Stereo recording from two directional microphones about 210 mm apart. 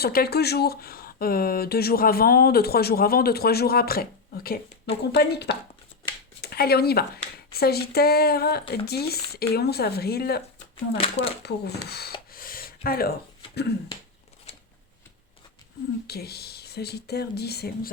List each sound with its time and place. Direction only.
0.0 s speech: 45° left (ahead or behind)
10.9 s speech: 25° left (ahead or behind)
11.4 s speech: 50° left (ahead or behind)
12.3 s a sound: 45° left (ahead or behind)
16.0 s speech: 50° left (ahead or behind)